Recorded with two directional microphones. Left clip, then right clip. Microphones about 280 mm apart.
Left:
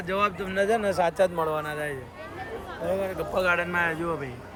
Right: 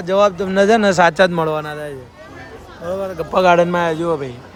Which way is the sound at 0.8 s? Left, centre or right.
Right.